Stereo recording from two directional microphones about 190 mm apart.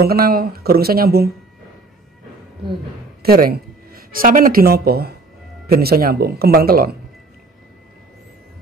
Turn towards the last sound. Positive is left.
turn(degrees=-50)  # may be behind; listen again after turning